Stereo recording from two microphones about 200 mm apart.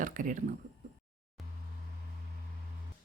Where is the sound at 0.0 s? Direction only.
40° right (ahead or behind).